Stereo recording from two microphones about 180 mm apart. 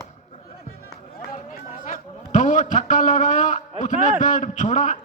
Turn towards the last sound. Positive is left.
turn(degrees=40)  # may be behind; listen again after turning